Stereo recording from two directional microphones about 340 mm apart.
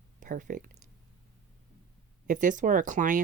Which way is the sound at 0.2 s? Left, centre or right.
Right.